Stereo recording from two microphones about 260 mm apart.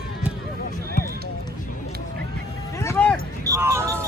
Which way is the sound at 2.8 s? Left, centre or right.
Centre.